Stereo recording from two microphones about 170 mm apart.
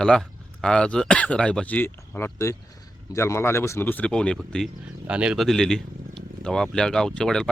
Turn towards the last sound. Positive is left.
turn(degrees=5)  # may be behind; listen again after turning